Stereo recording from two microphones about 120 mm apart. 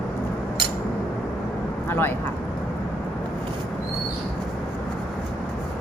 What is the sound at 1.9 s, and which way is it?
Speech, 20° left (ahead or behind).